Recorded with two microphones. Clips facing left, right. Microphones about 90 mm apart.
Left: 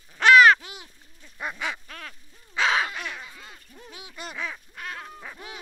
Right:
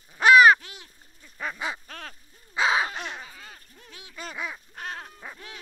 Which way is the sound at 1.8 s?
40° right (ahead or behind).